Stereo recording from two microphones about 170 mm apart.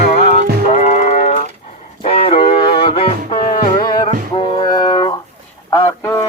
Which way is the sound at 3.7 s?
25° left (ahead or behind).